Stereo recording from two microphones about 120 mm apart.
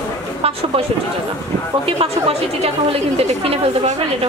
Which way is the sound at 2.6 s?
55° right (ahead or behind).